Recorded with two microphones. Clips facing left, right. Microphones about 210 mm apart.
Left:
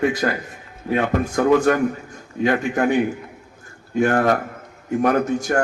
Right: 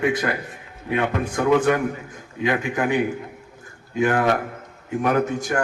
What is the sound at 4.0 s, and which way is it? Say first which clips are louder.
A man's voice: left 2 dB; 45° left (ahead or behind).